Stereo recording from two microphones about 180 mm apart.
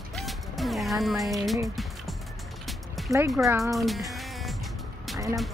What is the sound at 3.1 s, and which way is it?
Speech, 15° right (ahead or behind).